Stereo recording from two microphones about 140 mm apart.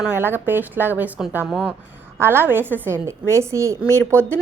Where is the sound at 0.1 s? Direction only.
15° right (ahead or behind).